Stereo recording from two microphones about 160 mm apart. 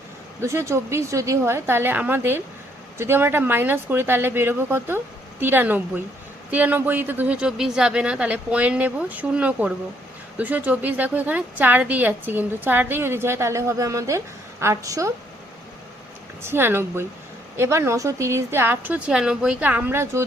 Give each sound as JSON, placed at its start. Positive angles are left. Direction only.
{"t": 0.4, "sound": "a woman's voice", "side_deg": -20}
{"t": 16.4, "sound": "a woman's voice", "side_deg": -15}